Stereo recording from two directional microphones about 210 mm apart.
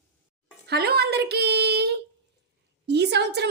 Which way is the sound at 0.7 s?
50° right (ahead or behind).